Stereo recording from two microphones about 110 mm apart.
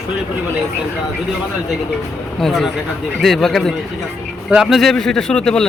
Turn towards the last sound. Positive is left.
turn(degrees=5)  # may be behind; listen again after turning